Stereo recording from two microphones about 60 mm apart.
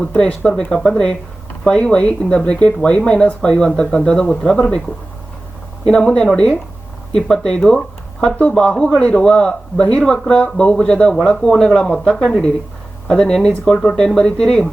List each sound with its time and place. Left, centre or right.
0.2 s speech: centre
5.9 s speech: centre
7.7 s a sound: centre
8.4 s speech: centre